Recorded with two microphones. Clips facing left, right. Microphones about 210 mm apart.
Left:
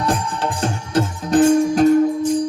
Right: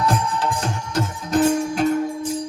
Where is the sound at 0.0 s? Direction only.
30° left (ahead or behind).